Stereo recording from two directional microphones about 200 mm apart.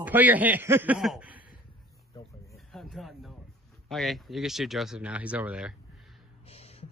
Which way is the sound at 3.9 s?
Centre (ahead or behind).